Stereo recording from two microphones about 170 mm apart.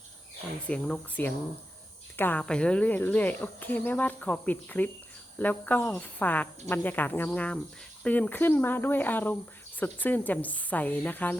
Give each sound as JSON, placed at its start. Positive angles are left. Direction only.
{"t": 0.7, "sound": "speech", "side_deg": 5}